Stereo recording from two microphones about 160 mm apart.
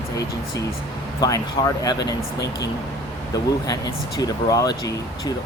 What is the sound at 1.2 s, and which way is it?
Speech, 20° left (ahead or behind).